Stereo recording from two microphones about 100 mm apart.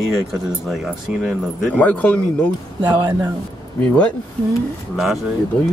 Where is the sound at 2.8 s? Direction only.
50° right (ahead or behind).